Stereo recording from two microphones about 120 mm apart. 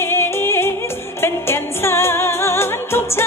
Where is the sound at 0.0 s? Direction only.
20° left (ahead or behind).